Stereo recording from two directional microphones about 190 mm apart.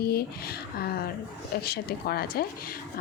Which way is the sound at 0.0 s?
55° left (ahead or behind).